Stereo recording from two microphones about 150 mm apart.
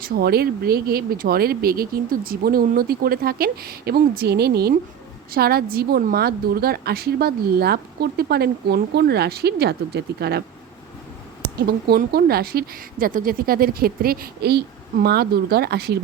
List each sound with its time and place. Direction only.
0.0 s a woman's voice: 90° right
11.4 s a woman's voice: 90° right